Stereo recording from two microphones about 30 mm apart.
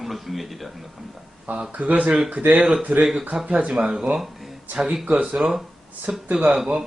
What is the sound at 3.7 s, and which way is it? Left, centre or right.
Speech, right.